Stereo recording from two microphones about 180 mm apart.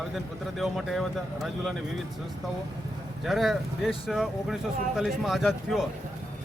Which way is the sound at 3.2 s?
Centre (ahead or behind).